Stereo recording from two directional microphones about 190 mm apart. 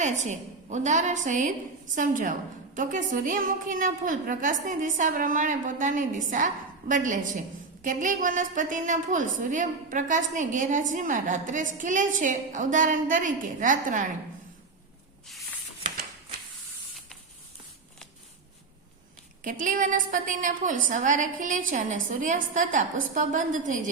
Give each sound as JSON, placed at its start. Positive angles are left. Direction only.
{"t": 0.0, "sound": "a woman's voice", "side_deg": -40}
{"t": 19.5, "sound": "a woman's voice", "side_deg": -45}